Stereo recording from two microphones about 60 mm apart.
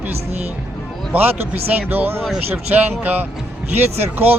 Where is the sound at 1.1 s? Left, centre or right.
Right.